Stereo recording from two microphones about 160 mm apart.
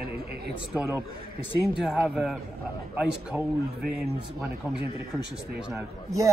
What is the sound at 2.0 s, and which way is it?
Speech, 5° right (ahead or behind).